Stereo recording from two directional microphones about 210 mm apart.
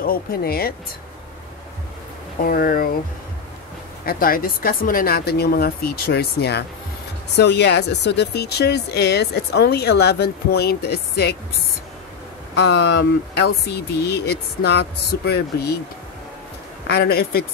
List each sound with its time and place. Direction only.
0.0 s speech: 45° left (ahead or behind)
2.4 s speech: 45° left (ahead or behind)
4.0 s speech: 45° left (ahead or behind)
12.5 s speech: 55° left (ahead or behind)
16.8 s speech: 50° left (ahead or behind)